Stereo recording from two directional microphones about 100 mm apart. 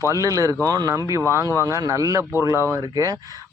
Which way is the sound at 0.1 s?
35° right (ahead or behind).